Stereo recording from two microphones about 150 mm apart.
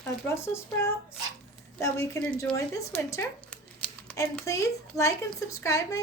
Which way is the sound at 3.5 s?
10° left (ahead or behind).